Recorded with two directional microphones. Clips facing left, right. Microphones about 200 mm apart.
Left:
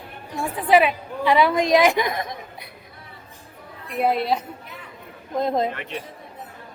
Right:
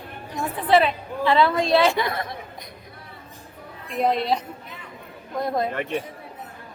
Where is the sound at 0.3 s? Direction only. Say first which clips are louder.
Left 1 dB; 10° left (ahead or behind).